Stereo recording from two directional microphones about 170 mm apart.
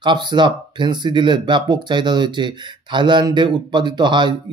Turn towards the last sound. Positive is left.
turn(degrees=-25)  # may be behind; listen again after turning